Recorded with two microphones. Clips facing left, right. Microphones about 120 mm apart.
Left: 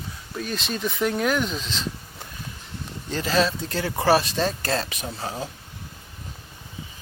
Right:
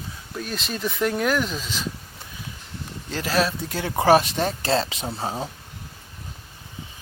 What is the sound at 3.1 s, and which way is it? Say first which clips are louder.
Speech: left 1 dB; 5° right (ahead or behind).